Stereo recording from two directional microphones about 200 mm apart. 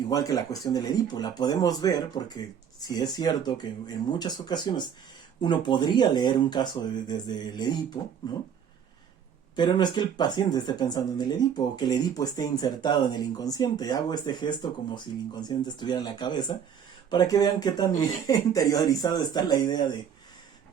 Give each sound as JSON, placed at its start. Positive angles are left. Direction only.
{"t": 0.1, "sound": "speech", "side_deg": 15}
{"t": 9.6, "sound": "speech", "side_deg": 20}